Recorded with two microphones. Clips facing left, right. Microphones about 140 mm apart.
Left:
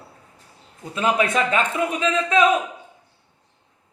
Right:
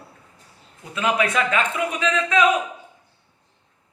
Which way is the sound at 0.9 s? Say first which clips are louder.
Left 1 dB; 35° left (ahead or behind).